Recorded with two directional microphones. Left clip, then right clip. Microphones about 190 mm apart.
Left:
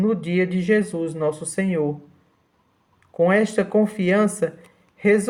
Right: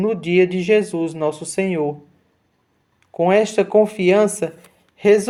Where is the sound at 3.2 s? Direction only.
20° right (ahead or behind).